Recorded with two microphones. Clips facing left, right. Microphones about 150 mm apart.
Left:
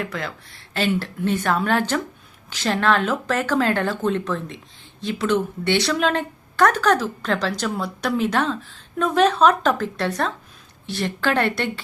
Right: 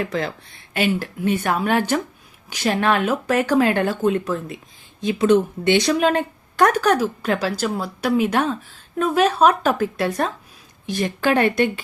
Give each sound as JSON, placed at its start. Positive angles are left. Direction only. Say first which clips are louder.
{"t": 0.0, "sound": "speech", "louder": "right 5 dB", "side_deg": -25}
{"t": 0.7, "sound": "speech", "louder": "right 1 dB", "side_deg": -15}